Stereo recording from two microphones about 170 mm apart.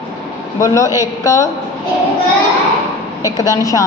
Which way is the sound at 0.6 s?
20° left (ahead or behind).